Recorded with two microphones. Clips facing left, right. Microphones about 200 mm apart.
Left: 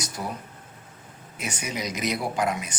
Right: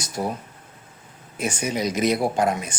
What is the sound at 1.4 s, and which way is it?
Speech, 30° right (ahead or behind).